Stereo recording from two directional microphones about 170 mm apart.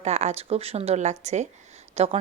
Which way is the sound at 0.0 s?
40° right (ahead or behind).